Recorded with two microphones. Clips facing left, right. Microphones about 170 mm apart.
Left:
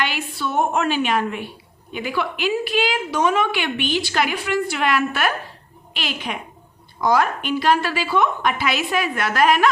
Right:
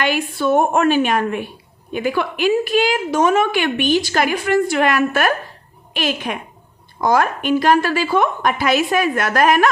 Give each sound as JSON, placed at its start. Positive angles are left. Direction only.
{"t": 0.0, "sound": "a woman's voice", "side_deg": -50}